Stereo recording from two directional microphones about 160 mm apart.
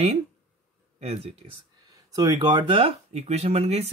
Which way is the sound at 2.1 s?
25° right (ahead or behind).